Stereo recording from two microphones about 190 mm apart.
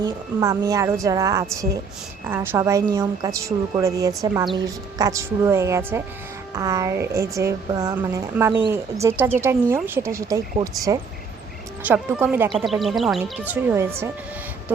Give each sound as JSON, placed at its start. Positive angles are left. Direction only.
{"t": 0.0, "sound": "speech", "side_deg": -20}